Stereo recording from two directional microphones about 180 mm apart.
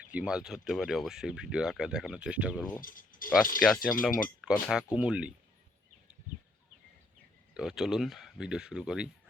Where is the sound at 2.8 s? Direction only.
50° left (ahead or behind).